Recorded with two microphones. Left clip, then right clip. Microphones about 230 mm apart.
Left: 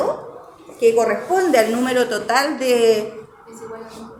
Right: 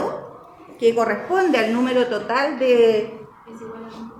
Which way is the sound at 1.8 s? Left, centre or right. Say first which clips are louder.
Left 1 dB; centre.